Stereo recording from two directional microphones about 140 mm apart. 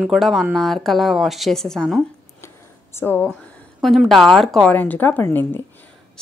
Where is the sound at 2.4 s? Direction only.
20° left (ahead or behind).